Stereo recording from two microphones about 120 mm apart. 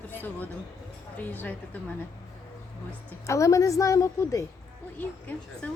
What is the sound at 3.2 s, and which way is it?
A woman's voice, 25° left (ahead or behind).